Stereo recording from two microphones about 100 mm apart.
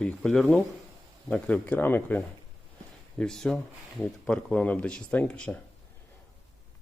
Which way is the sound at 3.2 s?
5° left (ahead or behind).